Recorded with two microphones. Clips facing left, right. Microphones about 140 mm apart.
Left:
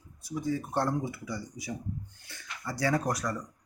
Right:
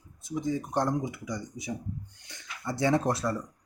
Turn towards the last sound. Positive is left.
turn(degrees=-25)  # may be behind; listen again after turning